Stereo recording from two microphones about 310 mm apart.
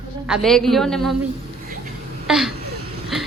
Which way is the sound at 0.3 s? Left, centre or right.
Centre.